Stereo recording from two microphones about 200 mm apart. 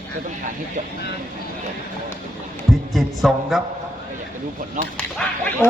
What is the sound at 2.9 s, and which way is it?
Speech, centre (ahead or behind).